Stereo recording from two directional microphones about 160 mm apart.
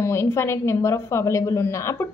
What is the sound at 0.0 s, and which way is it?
A woman's voice, 15° left (ahead or behind).